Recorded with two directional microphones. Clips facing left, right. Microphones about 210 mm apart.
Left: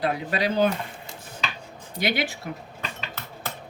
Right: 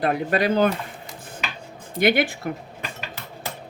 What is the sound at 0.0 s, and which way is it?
Speech, 55° right (ahead or behind).